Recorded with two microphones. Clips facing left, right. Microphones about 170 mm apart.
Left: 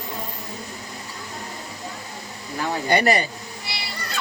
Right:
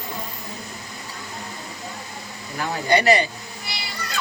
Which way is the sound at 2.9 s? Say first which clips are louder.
Right 2 dB; 50° left (ahead or behind).